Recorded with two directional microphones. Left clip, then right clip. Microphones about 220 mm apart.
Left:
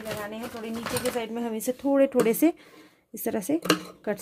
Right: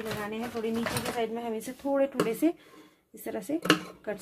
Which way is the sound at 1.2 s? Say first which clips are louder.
Even; 45° left (ahead or behind).